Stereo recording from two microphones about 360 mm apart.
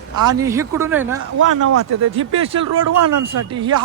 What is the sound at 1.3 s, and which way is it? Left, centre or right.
Speech, right.